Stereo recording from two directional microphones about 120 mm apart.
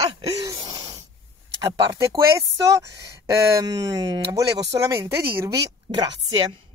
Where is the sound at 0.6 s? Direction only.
35° right (ahead or behind).